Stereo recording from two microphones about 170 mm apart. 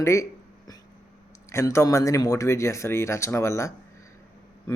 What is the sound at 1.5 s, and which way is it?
Speech, 15° left (ahead or behind).